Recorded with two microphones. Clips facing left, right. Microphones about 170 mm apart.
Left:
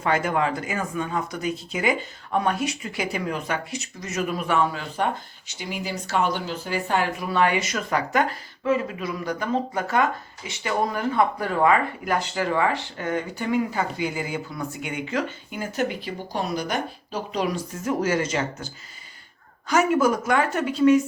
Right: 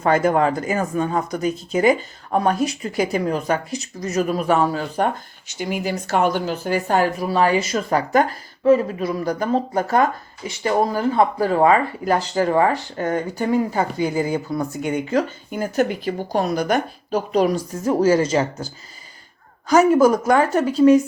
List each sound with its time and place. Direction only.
0.0 s speech: 40° right (ahead or behind)
5.5 s speech: 50° right (ahead or behind)